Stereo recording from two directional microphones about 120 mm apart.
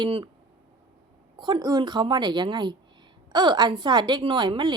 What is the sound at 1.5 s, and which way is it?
A woman's voice, 35° right (ahead or behind).